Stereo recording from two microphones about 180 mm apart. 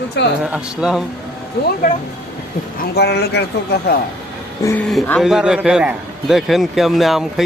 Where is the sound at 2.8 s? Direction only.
65° left (ahead or behind).